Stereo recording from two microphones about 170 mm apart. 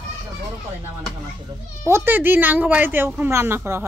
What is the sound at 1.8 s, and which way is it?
Speech, 10° right (ahead or behind).